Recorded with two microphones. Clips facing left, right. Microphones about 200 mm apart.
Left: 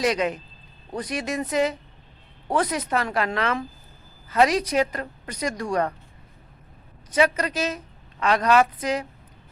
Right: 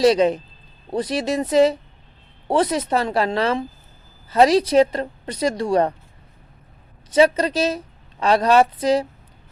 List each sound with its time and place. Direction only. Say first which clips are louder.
0.0 s a woman's voice: right 8 dB; 30° right (ahead or behind)
7.1 s a woman's voice: right 6 dB; 30° right (ahead or behind)